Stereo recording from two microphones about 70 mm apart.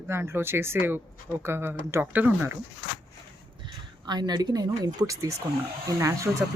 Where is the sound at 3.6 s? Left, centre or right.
Right.